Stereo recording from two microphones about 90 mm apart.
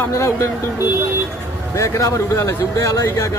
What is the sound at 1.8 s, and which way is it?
Speech, 35° left (ahead or behind).